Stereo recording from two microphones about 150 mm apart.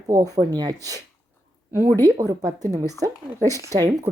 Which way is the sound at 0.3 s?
25° right (ahead or behind).